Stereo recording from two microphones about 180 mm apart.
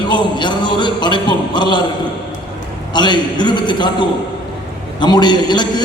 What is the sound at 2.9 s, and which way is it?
A man's voice, 25° left (ahead or behind).